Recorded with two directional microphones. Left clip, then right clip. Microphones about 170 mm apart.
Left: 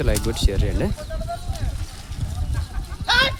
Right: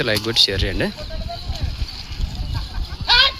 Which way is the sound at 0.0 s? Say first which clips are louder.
Right 8 dB; 5° left (ahead or behind).